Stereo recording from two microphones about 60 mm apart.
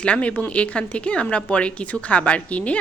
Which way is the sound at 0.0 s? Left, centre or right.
Centre.